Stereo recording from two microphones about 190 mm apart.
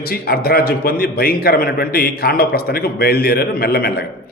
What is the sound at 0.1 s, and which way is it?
A man's voice, 55° left (ahead or behind).